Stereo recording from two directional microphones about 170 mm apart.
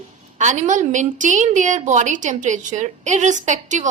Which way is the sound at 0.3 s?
45° right (ahead or behind).